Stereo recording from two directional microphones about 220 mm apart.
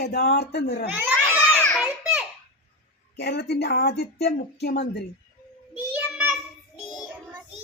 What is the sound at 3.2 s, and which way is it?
A woman's voice, 50° left (ahead or behind).